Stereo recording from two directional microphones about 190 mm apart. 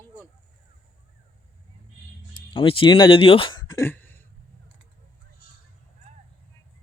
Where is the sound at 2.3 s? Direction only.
25° left (ahead or behind); by 4.2 s 10° left (ahead or behind).